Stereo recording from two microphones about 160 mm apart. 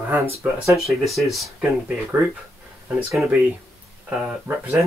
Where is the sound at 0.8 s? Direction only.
Centre (ahead or behind).